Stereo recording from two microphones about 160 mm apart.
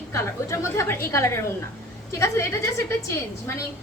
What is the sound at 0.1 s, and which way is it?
A woman's voice, 20° left (ahead or behind).